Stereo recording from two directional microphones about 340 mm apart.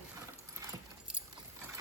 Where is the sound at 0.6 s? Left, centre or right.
Centre.